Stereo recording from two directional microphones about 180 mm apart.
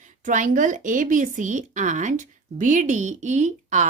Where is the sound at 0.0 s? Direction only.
45° right (ahead or behind).